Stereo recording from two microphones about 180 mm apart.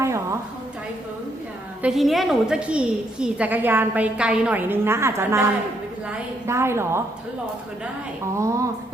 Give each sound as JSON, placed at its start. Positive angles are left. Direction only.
{"t": 1.8, "sound": "a woman's voice", "side_deg": 0}
{"t": 8.4, "sound": "a woman's voice", "side_deg": -15}